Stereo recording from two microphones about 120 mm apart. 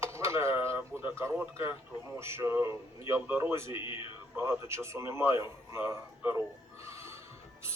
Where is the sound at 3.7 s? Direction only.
45° left (ahead or behind).